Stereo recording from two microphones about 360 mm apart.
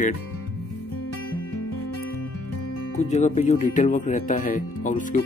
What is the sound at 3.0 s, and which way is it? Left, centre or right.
Speech, centre.